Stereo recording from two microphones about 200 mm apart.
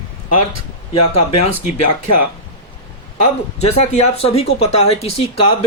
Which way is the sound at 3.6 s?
30° left (ahead or behind).